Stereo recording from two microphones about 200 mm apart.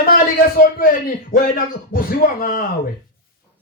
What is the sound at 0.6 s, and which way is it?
Speech, 45° left (ahead or behind).